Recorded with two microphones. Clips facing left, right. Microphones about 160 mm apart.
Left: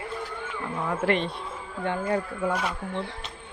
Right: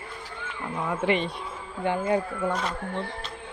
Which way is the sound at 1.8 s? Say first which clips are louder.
Right 2 dB; 15° right (ahead or behind).